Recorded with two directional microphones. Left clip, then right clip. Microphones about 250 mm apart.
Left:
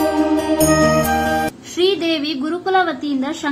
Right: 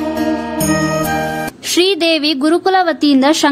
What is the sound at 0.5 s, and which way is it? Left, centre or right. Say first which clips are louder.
Music: left 4 dB; centre.